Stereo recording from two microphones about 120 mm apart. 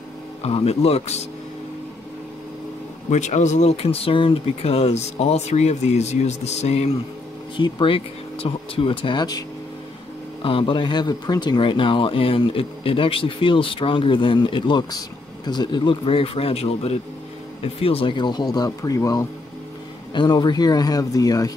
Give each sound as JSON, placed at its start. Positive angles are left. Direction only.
{"t": 0.4, "sound": "speech", "side_deg": 55}
{"t": 3.1, "sound": "speech", "side_deg": 75}
{"t": 7.5, "sound": "speech", "side_deg": 45}
{"t": 10.4, "sound": "speech", "side_deg": 45}